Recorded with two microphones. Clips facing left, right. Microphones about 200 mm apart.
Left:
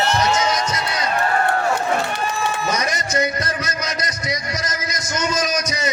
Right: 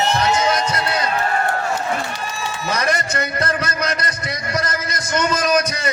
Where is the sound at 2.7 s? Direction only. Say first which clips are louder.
Right 1 dB; 55° right (ahead or behind).